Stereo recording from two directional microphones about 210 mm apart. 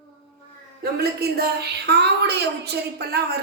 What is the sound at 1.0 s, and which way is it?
A woman's voice, 50° right (ahead or behind).